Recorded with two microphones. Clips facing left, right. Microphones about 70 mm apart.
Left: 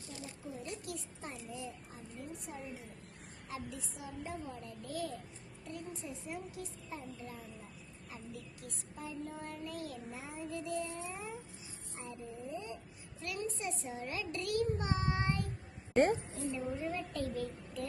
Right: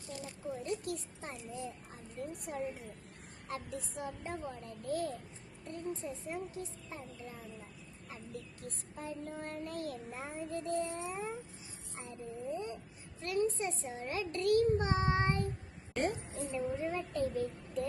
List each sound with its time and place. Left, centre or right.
0.2 s a sound: right
2.5 s a woman's voice: right
3.5 s a child's voice: right
8.6 s a child's voice: right
11.0 s a child's voice: right
12.5 s a child's voice: right
16.0 s a woman's voice: left
16.3 s a child's voice: right